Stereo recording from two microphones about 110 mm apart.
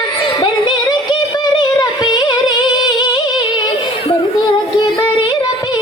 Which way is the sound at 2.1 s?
45° left (ahead or behind).